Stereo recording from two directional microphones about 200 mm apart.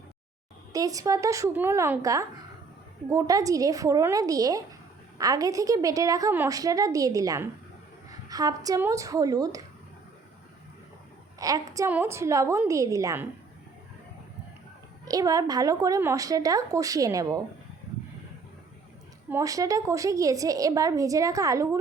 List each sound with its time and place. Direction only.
0.7 s a woman's voice: 15° right (ahead or behind)
11.3 s a woman's voice: 15° right (ahead or behind)
15.0 s a woman's voice: 15° right (ahead or behind)
19.3 s a woman's voice: 15° right (ahead or behind)